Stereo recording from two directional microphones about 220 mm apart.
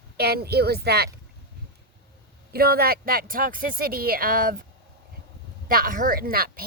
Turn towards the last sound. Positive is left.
turn(degrees=-40)  # may be behind; listen again after turning